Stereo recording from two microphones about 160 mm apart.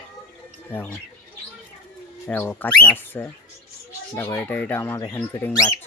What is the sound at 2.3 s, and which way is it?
Speech, 10° left (ahead or behind).